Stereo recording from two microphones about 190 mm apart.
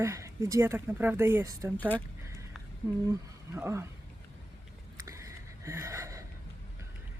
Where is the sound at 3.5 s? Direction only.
15° right (ahead or behind).